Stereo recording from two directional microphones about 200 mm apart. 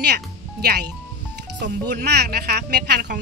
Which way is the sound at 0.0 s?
55° right (ahead or behind).